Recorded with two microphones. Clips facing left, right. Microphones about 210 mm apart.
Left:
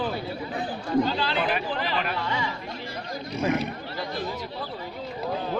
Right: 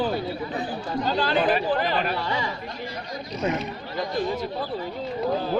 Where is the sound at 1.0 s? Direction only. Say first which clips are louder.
Right 4 dB; 45° right (ahead or behind).